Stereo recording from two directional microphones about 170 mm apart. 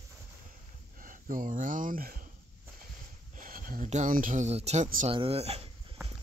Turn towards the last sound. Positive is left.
turn(degrees=-35)  # may be behind; listen again after turning